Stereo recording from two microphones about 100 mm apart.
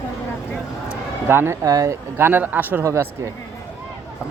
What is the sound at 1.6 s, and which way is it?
Speech, 35° right (ahead or behind).